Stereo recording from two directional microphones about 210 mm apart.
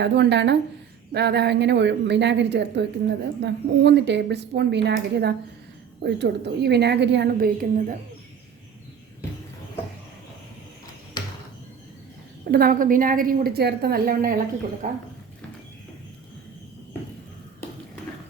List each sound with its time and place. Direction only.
0.0 s a woman's voice: 55° right (ahead or behind)
12.5 s a woman's voice: 45° right (ahead or behind)